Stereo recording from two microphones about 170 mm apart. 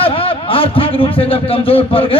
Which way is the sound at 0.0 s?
30° left (ahead or behind).